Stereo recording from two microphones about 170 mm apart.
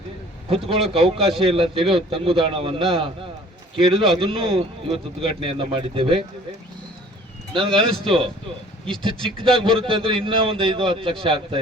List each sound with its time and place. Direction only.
0.5 s a man's voice: 35° right (ahead or behind)
7.5 s a man's voice: 30° right (ahead or behind)
9.4 s a man's voice: 30° right (ahead or behind)